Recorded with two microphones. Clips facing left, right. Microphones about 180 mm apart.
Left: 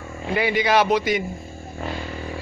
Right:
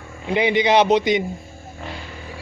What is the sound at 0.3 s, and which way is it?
Speech, 20° right (ahead or behind).